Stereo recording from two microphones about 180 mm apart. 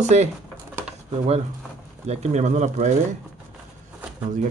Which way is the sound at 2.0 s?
35° right (ahead or behind).